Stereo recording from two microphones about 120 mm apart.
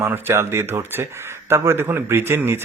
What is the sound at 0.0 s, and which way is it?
Speech, 20° right (ahead or behind).